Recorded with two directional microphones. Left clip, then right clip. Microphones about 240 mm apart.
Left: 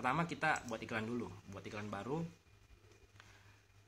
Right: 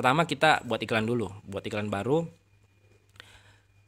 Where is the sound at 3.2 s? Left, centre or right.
Right.